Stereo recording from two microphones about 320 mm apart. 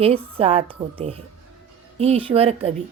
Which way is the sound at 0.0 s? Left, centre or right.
Centre.